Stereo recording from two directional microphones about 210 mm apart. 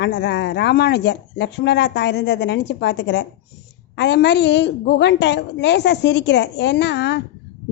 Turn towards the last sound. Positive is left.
turn(degrees=55)  # may be behind; listen again after turning